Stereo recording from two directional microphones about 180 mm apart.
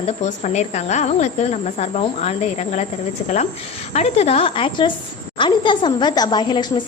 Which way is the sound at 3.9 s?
35° left (ahead or behind).